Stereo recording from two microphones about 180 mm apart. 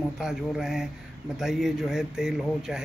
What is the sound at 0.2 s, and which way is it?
Speech, centre (ahead or behind).